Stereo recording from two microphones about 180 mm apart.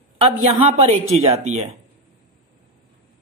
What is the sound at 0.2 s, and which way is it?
A man's voice, 35° right (ahead or behind).